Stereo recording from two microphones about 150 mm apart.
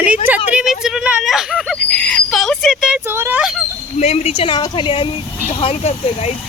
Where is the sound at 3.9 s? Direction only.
45° left (ahead or behind).